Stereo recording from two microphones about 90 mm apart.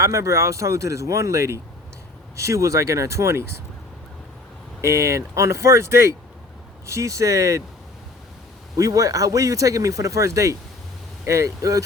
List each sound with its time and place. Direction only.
0.0 s speech: 35° right (ahead or behind)
4.8 s speech: 35° right (ahead or behind)
8.7 s speech: 40° right (ahead or behind)